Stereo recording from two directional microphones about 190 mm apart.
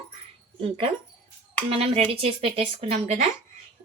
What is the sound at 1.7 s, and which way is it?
Speech, 30° right (ahead or behind).